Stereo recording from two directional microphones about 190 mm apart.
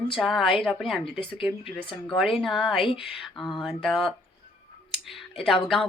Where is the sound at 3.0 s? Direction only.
Centre (ahead or behind).